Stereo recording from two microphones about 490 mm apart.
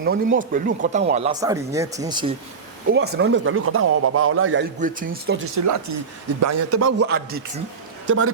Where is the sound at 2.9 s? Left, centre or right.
Centre.